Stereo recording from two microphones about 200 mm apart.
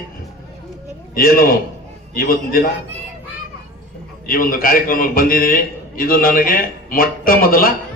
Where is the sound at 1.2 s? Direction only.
45° left (ahead or behind).